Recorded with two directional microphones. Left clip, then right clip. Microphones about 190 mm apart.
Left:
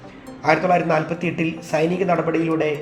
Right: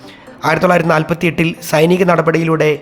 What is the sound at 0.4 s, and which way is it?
A man's voice, 40° right (ahead or behind).